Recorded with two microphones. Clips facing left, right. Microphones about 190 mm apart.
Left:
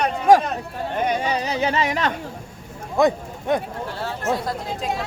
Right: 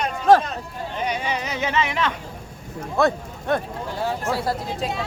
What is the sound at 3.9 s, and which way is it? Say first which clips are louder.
Speech: right 3 dB; 15° right (ahead or behind).